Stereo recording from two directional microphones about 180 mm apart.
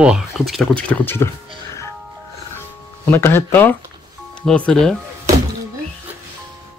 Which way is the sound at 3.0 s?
15° left (ahead or behind).